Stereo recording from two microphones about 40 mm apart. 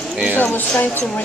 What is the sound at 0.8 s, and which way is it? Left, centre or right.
Speech, left.